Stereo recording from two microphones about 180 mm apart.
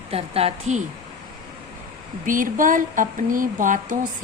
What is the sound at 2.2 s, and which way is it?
Speech, 50° right (ahead or behind).